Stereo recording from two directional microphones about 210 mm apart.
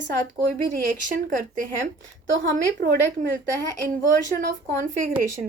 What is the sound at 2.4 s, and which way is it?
Speech, 50° right (ahead or behind).